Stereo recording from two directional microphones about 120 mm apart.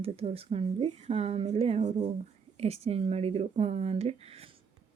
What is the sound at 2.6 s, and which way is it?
Speech, 60° right (ahead or behind).